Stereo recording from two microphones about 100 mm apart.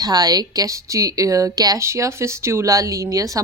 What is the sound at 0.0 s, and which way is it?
A woman's voice, 40° right (ahead or behind).